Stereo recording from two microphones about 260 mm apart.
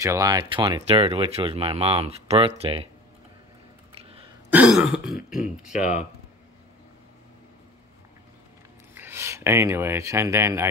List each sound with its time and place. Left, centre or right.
0.0 s speech: centre
4.5 s throat clearing: centre
5.3 s speech: left
8.9 s speech: centre